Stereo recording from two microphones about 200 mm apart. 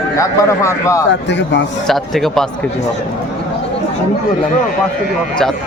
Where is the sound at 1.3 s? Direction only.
65° left (ahead or behind).